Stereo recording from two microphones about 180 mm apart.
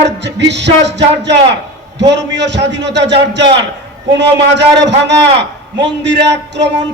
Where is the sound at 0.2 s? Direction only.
75° right (ahead or behind).